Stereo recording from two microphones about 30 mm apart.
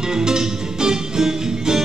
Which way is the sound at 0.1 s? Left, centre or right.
Right.